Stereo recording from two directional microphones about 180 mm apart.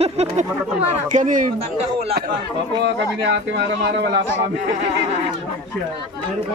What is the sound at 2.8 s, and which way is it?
A man's voice, 75° right (ahead or behind).